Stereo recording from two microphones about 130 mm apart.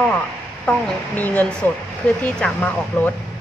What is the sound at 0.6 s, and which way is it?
Speech, 10° left (ahead or behind).